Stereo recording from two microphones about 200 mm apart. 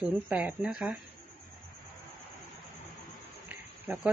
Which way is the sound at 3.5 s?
5° right (ahead or behind).